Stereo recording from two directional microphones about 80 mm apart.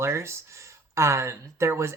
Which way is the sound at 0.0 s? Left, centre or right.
Right.